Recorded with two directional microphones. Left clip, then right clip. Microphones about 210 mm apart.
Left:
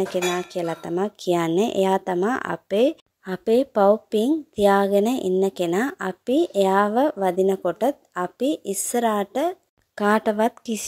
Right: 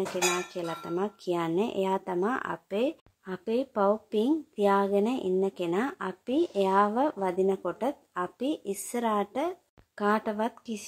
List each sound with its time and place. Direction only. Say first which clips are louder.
0.1 s speech: left 5 dB; 30° left (ahead or behind)